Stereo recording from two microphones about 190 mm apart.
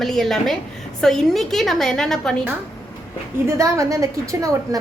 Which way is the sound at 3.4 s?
15° right (ahead or behind).